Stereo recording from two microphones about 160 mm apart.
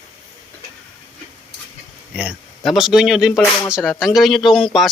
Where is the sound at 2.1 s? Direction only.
5° right (ahead or behind).